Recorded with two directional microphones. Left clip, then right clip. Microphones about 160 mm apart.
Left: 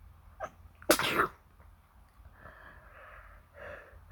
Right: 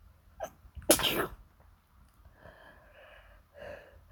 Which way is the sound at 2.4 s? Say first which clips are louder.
Left 2 dB; 25° right (ahead or behind).